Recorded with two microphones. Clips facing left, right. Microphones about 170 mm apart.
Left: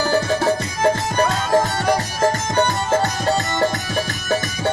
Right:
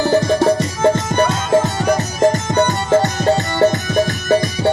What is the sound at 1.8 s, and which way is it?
Music, 20° right (ahead or behind).